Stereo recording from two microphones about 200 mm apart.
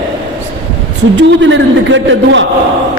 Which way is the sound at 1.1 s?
65° right (ahead or behind).